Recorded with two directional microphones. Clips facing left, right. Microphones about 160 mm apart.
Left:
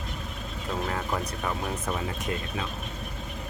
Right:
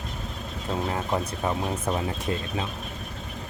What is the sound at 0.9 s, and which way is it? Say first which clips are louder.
Speech: right 3 dB; 25° right (ahead or behind).